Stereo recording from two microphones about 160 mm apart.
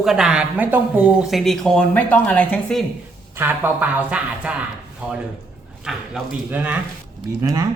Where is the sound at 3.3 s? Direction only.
15° right (ahead or behind).